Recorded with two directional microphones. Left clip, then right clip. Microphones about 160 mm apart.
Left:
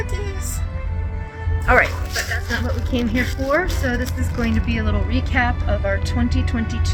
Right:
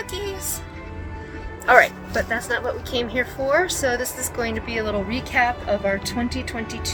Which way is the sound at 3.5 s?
30° right (ahead or behind).